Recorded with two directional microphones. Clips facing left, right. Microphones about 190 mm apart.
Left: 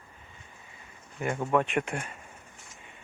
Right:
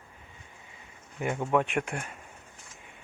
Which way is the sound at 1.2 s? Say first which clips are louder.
Even; 5° right (ahead or behind).